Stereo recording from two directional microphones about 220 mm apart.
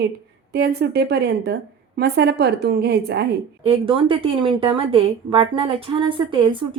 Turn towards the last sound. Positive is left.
turn(degrees=-25)  # may be behind; listen again after turning